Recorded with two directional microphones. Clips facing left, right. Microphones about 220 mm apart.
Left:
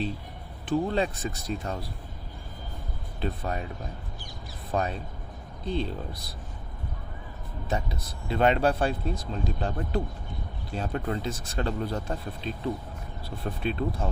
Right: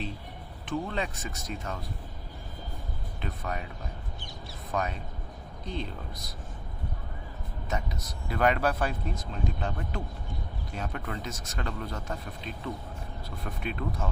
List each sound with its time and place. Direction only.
0.6 s speech: 35° left (ahead or behind)
3.2 s speech: 35° left (ahead or behind)
4.7 s speech: 30° left (ahead or behind)
7.7 s speech: 30° left (ahead or behind)